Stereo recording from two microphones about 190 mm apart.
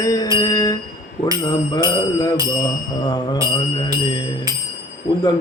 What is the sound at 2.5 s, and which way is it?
Speech, 20° left (ahead or behind).